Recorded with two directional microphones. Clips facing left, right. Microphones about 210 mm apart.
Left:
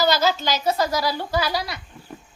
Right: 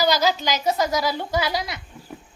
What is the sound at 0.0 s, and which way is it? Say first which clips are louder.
A woman's voice: even; 15° right (ahead or behind).